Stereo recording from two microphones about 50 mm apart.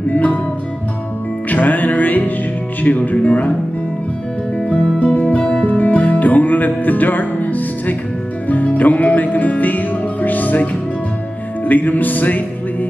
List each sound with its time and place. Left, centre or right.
0.1 s music: left
1.5 s music: left
4.6 s music: left
5.4 s music: left
5.7 s music: left